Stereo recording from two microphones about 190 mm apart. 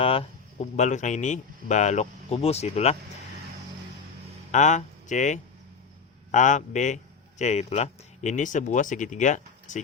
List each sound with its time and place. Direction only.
0.0 s speech: 30° left (ahead or behind)
4.5 s a man's voice: 40° left (ahead or behind)